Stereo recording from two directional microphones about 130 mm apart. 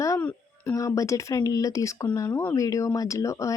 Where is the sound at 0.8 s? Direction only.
25° left (ahead or behind).